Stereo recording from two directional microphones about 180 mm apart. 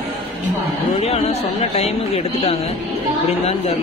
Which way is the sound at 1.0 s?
35° left (ahead or behind).